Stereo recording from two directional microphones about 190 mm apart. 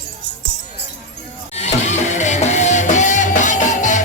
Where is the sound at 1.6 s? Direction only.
35° left (ahead or behind).